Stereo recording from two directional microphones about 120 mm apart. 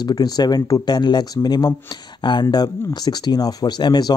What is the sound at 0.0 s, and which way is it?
Speech, 35° left (ahead or behind).